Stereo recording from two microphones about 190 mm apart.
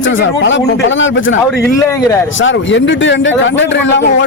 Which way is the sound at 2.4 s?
80° left.